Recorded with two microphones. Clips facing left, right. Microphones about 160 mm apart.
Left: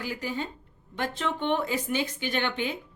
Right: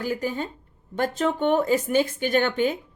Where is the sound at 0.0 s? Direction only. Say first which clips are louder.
Right 5 dB; 45° right (ahead or behind).